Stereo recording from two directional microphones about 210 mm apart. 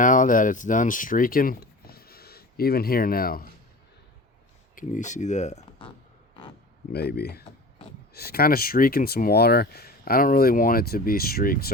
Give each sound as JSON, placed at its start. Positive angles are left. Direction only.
{"t": 0.0, "sound": "speech", "side_deg": 40}
{"t": 4.7, "sound": "speech", "side_deg": 40}
{"t": 6.9, "sound": "speech", "side_deg": 50}